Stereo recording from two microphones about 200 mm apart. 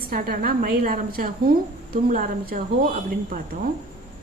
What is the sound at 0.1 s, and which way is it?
A woman's voice, 50° right (ahead or behind).